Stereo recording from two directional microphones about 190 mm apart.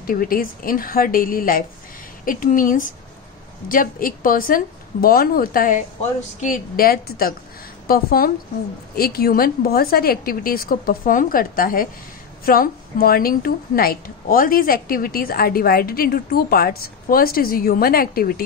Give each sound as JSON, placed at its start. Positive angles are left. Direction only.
{"t": 0.0, "sound": "a woman's voice", "side_deg": 50}